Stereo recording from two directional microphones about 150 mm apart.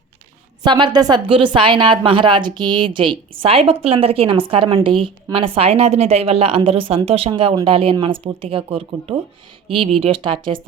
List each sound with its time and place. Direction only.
0.6 s a woman's voice: 30° right (ahead or behind)